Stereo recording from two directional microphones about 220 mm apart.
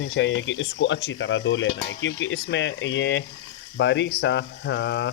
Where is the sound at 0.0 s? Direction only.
55° left (ahead or behind).